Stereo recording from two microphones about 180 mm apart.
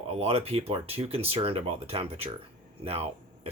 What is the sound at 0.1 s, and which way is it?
Speech, 35° right (ahead or behind).